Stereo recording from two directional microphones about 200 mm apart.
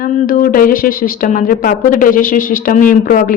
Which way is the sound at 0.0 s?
40° left (ahead or behind).